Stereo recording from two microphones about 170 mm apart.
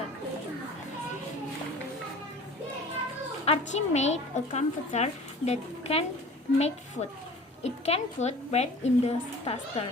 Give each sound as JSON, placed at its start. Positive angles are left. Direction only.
{"t": 3.4, "sound": "a woman's voice", "side_deg": 40}